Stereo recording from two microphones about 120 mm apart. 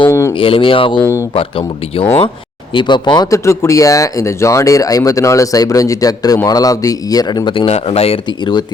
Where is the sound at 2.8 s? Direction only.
40° left (ahead or behind).